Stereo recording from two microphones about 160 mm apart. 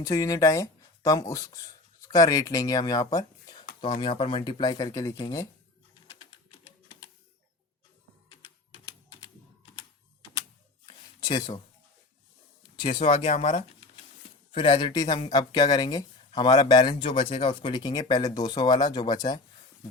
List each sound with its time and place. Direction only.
0.0 s speech: 20° left (ahead or behind)
3.8 s speech: 35° left (ahead or behind)
10.8 s a sound: 25° left (ahead or behind)
12.7 s speech: 35° left (ahead or behind)